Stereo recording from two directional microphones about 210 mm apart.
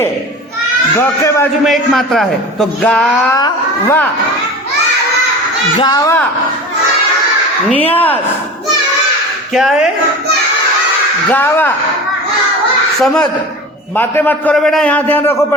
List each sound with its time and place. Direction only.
0.9 s a man's voice: 15° left (ahead or behind)
1.6 s a man's voice: centre (ahead or behind)
5.7 s a man's voice: 20° left (ahead or behind)
7.7 s a man's voice: 10° left (ahead or behind)
9.5 s a man's voice: centre (ahead or behind)
11.3 s a man's voice: 10° left (ahead or behind)
13.9 s a man's voice: 10° left (ahead or behind)